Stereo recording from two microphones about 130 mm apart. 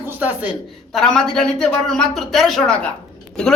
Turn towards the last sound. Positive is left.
turn(degrees=5)  # may be behind; listen again after turning